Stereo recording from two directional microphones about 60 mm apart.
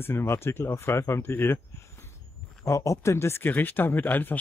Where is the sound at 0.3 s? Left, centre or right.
Left.